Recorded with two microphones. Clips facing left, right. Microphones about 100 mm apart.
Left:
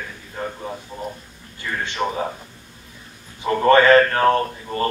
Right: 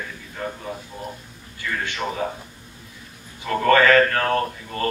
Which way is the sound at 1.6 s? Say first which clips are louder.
Left 3 dB; 25° left (ahead or behind).